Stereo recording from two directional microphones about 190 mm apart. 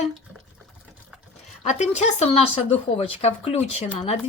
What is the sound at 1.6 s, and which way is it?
Speech, 40° left (ahead or behind).